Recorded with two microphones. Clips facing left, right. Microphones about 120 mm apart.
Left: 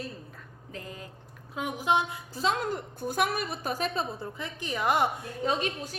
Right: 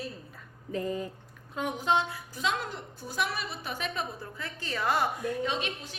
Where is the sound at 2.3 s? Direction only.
35° left (ahead or behind).